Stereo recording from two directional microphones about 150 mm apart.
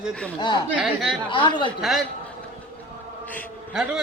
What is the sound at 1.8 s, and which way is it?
Speech, centre (ahead or behind).